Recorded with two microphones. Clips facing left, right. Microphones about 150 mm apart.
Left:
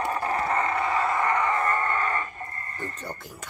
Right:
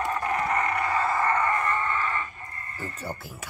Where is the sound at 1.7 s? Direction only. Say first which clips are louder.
Left 2 dB; 45° left (ahead or behind).